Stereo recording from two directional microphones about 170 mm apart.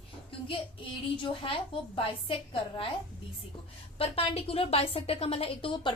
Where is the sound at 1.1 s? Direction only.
30° left (ahead or behind).